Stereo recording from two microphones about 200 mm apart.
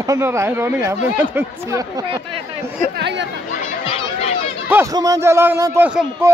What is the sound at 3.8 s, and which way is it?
Chatter, 25° left (ahead or behind).